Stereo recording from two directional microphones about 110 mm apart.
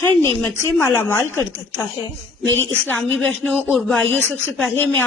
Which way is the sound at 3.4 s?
10° right (ahead or behind).